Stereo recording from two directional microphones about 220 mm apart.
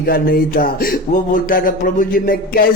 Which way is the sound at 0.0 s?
40° left (ahead or behind).